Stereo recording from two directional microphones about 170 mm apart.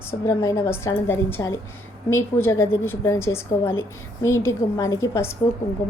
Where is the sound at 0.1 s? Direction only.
15° left (ahead or behind).